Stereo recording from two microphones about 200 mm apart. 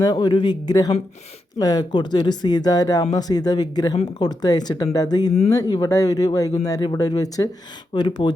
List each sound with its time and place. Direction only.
0.0 s speech: 20° left (ahead or behind)